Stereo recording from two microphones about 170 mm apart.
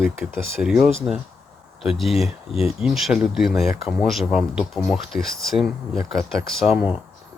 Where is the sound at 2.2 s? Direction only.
35° left (ahead or behind).